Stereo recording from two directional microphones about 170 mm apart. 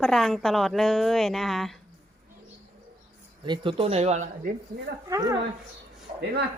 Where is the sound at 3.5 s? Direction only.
30° right (ahead or behind).